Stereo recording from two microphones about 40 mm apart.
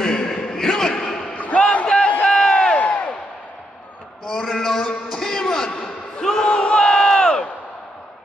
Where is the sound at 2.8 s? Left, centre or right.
Left.